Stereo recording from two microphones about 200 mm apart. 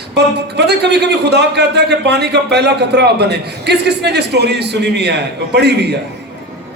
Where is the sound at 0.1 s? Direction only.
55° right (ahead or behind).